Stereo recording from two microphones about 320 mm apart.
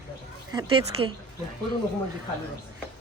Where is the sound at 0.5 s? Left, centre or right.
Centre.